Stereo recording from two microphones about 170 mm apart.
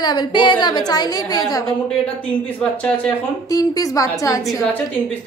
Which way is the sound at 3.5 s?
20° left (ahead or behind).